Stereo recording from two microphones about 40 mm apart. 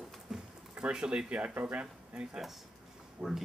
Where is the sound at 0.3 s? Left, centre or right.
Centre.